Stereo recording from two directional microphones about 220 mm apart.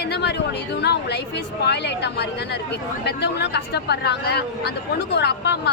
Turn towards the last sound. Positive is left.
turn(degrees=50)  # may be behind; listen again after turning